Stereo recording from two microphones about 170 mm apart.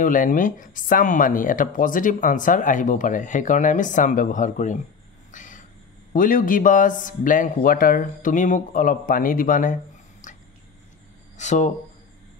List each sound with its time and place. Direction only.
0.0 s speech: 50° left (ahead or behind)
5.3 s vehicle: 50° left (ahead or behind)
6.1 s speech: 55° left (ahead or behind)
10.2 s a sound: 50° left (ahead or behind)
11.3 s speech: 45° left (ahead or behind)